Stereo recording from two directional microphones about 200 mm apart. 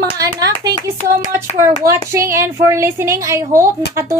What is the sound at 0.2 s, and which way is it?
Clapping, 20° right (ahead or behind).